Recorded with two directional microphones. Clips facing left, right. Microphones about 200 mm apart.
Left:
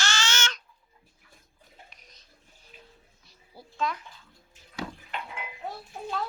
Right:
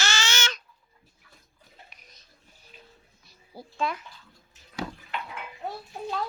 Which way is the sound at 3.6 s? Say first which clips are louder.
Right 5 dB; 40° right (ahead or behind).